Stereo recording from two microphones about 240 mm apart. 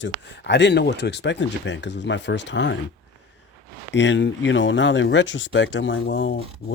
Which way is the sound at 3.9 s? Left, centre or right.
Left.